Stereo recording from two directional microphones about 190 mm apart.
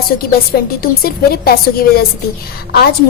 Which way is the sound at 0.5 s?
55° left (ahead or behind).